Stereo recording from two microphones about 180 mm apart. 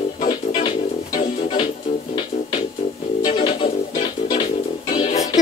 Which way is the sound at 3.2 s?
35° left (ahead or behind).